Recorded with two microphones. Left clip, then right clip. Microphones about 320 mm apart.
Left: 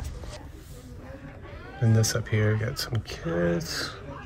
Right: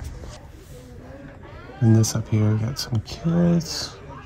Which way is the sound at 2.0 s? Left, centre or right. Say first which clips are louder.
Right 1 dB; centre.